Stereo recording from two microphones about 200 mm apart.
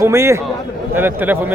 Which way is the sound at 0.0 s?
15° right (ahead or behind).